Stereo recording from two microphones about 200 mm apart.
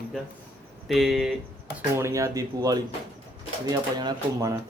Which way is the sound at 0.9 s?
Centre (ahead or behind).